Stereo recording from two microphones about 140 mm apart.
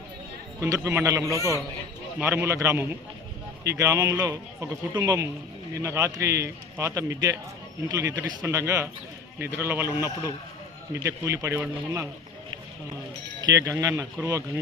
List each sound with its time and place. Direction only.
0.6 s speech: 20° right (ahead or behind)
13.4 s speech: 20° right (ahead or behind)